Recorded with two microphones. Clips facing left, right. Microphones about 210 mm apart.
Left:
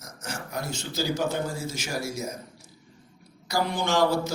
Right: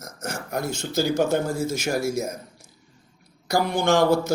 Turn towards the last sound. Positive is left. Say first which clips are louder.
# right 5 dB
turn(degrees=-50)  # may be behind; listen again after turning